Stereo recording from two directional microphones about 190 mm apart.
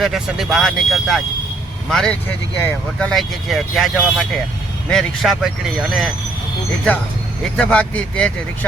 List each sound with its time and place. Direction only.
0.0 s speech: centre (ahead or behind)
7.5 s speech: 5° left (ahead or behind)